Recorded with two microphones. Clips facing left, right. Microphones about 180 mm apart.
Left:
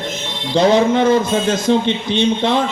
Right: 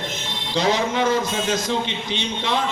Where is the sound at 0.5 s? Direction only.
30° left (ahead or behind).